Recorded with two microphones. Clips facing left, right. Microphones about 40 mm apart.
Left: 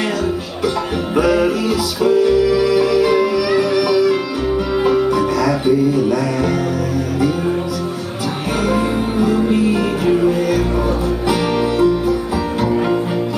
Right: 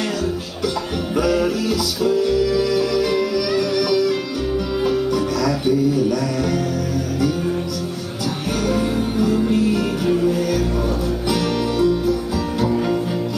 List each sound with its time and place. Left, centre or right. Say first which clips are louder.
1.1 s music: left 4 dB; left
8.6 s music: left 2 dB; left